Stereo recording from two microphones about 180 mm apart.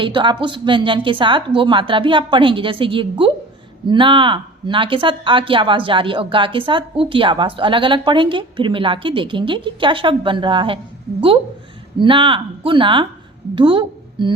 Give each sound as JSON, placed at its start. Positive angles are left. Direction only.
{"t": 0.0, "sound": "a woman's voice", "side_deg": -25}
{"t": 11.9, "sound": "a woman's voice", "side_deg": -30}